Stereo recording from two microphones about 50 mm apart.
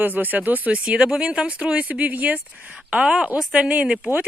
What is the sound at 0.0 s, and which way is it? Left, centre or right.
Speech, right.